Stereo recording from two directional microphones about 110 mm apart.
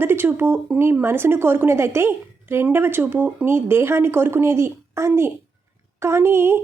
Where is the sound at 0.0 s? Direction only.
20° right (ahead or behind).